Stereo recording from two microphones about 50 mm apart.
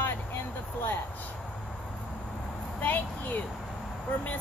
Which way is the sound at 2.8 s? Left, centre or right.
Left.